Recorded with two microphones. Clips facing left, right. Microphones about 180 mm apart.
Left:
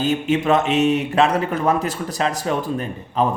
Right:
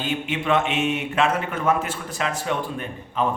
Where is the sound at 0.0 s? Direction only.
40° left (ahead or behind).